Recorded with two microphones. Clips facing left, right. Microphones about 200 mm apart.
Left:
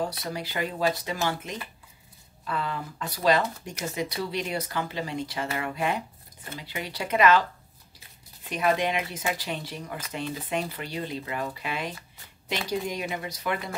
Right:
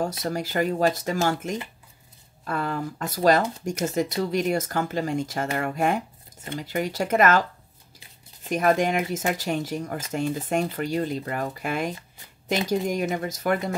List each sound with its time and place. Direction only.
0.0 s speech: 45° right (ahead or behind)
8.5 s speech: 45° right (ahead or behind)